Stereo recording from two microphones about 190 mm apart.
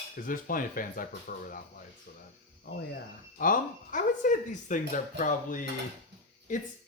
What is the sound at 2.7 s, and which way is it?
Speech, 60° left (ahead or behind).